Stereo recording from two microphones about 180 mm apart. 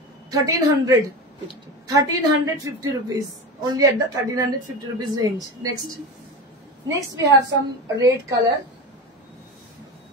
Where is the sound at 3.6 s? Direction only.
20° right (ahead or behind).